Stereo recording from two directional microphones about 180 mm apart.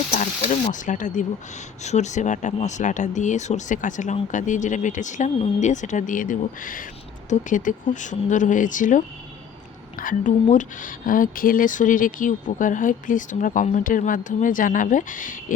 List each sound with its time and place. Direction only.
0.1 s speech: 40° left (ahead or behind)